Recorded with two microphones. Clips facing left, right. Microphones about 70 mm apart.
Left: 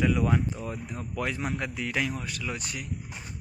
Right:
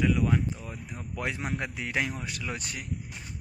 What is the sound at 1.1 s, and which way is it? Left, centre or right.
A man's voice, right.